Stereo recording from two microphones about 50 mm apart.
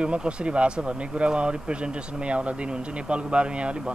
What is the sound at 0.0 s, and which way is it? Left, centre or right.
Speech, right.